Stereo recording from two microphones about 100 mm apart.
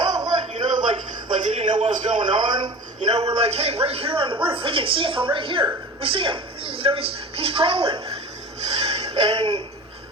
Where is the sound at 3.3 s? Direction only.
90° right; by 8.0 s 60° right (ahead or behind).